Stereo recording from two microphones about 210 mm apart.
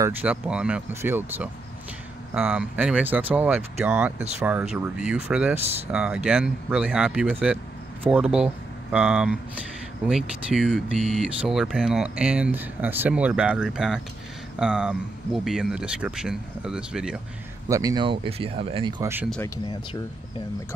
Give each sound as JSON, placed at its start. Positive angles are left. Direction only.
{"t": 0.0, "sound": "speech", "side_deg": -5}
{"t": 17.6, "sound": "speech", "side_deg": -15}
{"t": 19.3, "sound": "speech", "side_deg": 15}